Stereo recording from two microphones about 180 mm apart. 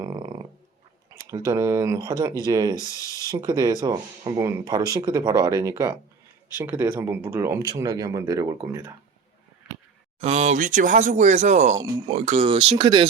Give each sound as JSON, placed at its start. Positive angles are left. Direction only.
{"t": 0.0, "sound": "a sound", "side_deg": -20}
{"t": 1.5, "sound": "speech", "side_deg": -15}
{"t": 10.2, "sound": "speech", "side_deg": -35}
{"t": 11.8, "sound": "speech", "side_deg": -25}
{"t": 12.2, "sound": "speech", "side_deg": -35}